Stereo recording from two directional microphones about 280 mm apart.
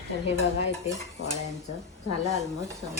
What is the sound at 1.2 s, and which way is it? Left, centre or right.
Cutlery, left.